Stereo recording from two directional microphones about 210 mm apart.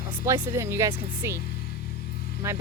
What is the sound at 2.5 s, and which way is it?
Speech, 10° right (ahead or behind).